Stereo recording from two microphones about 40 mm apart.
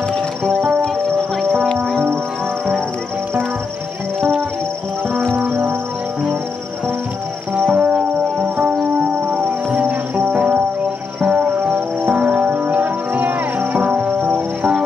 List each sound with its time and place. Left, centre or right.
4.2 s music: centre
5.3 s music: right
7.7 s music: right
8.4 s music: right
12.1 s music: right
12.4 s music: right